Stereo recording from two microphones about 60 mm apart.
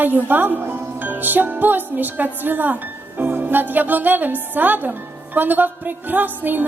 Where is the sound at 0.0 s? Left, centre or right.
Right.